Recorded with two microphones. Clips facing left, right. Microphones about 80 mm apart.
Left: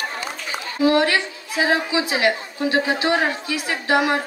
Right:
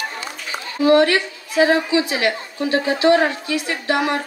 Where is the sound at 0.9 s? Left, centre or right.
Left.